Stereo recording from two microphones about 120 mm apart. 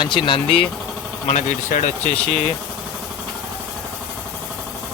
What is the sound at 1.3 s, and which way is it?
Speech, 80° left.